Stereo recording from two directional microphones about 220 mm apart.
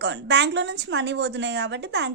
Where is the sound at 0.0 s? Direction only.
50° right (ahead or behind).